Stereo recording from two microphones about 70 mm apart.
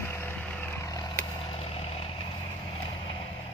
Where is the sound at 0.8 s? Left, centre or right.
Left.